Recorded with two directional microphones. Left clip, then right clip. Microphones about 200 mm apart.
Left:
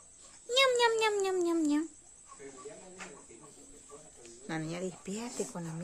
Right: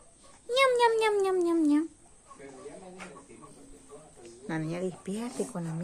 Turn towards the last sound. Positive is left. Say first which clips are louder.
# right 4 dB
turn(degrees=0)  # may be behind; listen again after turning